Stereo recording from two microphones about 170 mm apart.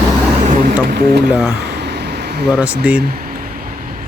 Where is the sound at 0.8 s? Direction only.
70° right (ahead or behind).